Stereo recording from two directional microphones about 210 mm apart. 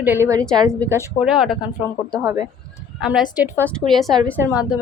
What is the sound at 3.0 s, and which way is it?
A woman's voice, centre (ahead or behind).